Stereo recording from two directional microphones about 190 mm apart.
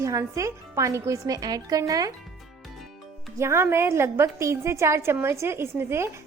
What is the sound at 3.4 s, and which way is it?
A woman's voice, 15° right (ahead or behind).